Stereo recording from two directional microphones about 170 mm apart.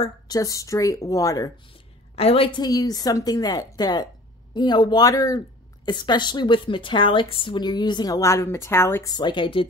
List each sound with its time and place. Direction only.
0.3 s a woman's voice: 20° left (ahead or behind)
1.7 s a woman's voice: 35° left (ahead or behind)